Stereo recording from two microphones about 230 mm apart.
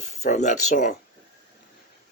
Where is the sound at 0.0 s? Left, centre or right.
Left.